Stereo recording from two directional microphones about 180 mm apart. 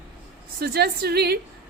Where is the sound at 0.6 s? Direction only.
60° right (ahead or behind).